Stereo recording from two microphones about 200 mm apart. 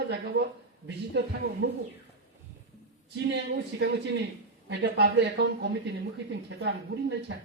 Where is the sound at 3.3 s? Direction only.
60° right (ahead or behind).